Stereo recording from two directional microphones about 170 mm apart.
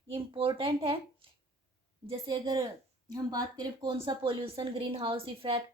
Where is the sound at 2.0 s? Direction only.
25° right (ahead or behind).